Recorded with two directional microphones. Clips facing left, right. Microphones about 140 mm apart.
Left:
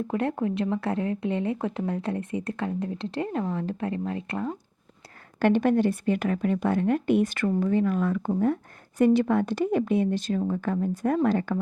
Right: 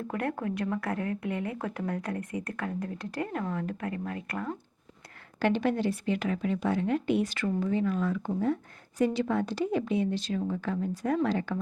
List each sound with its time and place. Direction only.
0.1 s a woman's voice: 25° left (ahead or behind)
5.4 s speech: 50° left (ahead or behind)